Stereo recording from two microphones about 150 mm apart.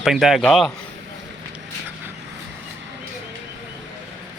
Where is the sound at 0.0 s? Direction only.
Centre (ahead or behind).